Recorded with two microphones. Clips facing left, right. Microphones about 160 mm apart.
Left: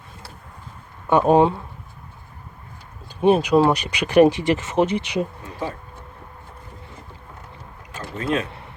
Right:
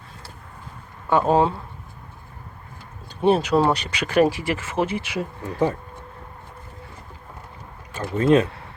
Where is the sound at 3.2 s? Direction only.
10° left (ahead or behind).